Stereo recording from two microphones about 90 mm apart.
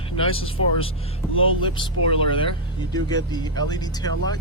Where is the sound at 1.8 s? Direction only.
75° left (ahead or behind).